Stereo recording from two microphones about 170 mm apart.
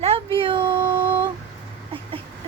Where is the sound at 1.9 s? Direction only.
35° right (ahead or behind).